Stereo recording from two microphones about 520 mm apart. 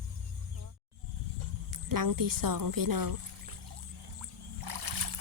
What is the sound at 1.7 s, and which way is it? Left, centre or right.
Speech, right.